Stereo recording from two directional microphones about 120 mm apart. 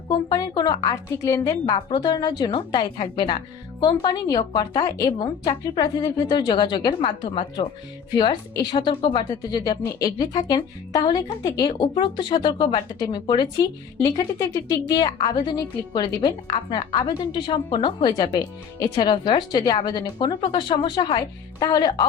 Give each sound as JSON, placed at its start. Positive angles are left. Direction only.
{"t": 0.1, "sound": "speech", "side_deg": 35}
{"t": 1.1, "sound": "a woman's voice", "side_deg": 30}
{"t": 1.6, "sound": "speech", "side_deg": 40}